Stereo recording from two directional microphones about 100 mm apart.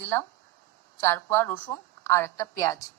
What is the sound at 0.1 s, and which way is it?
A woman's voice, 20° left (ahead or behind).